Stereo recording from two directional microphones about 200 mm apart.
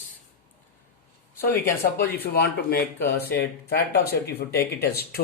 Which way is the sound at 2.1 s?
50° left (ahead or behind).